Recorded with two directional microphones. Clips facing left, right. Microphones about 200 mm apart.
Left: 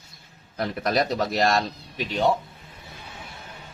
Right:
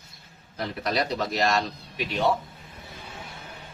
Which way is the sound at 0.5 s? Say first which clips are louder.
Left 3 dB; 50° left (ahead or behind).